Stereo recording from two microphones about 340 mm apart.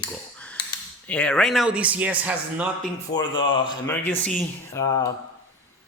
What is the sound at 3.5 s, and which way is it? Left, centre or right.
Speech, centre.